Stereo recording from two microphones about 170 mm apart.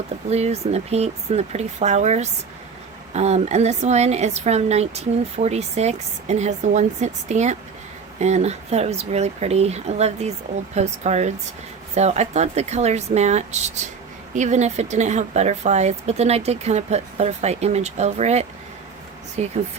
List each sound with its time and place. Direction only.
0.3 s speech: 40° right (ahead or behind)